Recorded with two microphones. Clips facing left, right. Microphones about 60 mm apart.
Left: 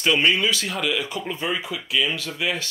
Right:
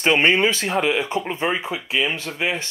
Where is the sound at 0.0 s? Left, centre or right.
Right.